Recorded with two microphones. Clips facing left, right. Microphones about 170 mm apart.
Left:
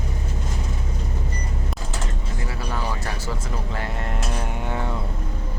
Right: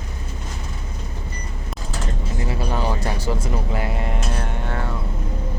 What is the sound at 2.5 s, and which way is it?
Music, 20° right (ahead or behind).